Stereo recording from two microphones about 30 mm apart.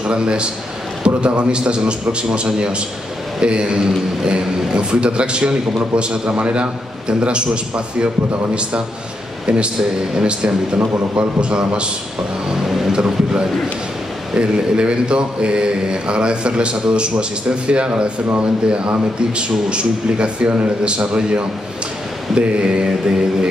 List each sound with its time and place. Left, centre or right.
0.0 s a man's voice: right
1.0 s mantra: right
9.5 s mantra: right
12.9 s speech: right
14.3 s mantra: right